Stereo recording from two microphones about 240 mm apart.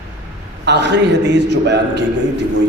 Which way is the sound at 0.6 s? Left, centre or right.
Right.